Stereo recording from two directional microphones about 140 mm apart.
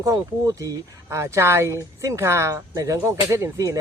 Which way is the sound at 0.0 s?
25° right (ahead or behind).